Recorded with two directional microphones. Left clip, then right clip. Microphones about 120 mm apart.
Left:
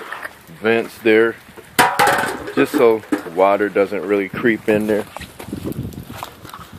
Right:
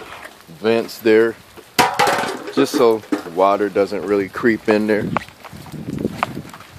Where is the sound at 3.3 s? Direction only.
10° right (ahead or behind).